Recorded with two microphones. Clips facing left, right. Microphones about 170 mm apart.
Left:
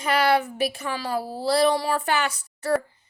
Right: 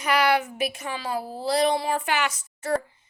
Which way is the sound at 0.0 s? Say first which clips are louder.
Left 1 dB; 30° left (ahead or behind).